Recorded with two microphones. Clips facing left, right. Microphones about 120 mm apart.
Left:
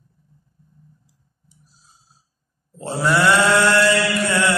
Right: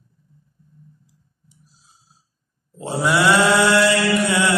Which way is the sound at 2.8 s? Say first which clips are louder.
Even; 10° right (ahead or behind).